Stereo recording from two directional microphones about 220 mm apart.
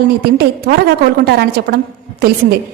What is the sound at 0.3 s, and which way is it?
A woman's voice, 45° right (ahead or behind).